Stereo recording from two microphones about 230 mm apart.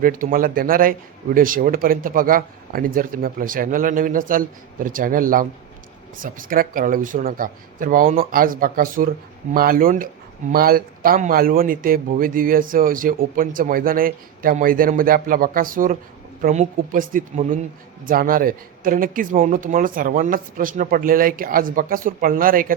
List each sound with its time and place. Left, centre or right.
0.0 s speech: right